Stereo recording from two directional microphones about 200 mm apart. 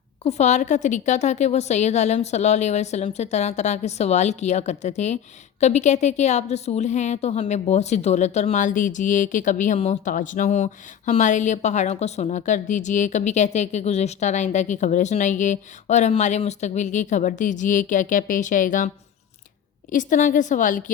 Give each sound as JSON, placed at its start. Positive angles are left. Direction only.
{"t": 0.3, "sound": "a woman's voice", "side_deg": 35}
{"t": 19.9, "sound": "a woman's voice", "side_deg": 40}